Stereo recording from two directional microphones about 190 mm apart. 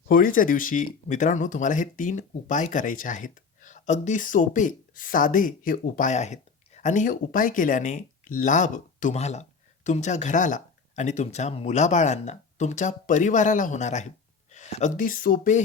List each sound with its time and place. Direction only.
0.1 s speech: 45° left (ahead or behind)